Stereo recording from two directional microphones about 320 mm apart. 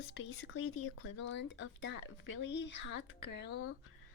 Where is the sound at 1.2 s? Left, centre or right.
Left.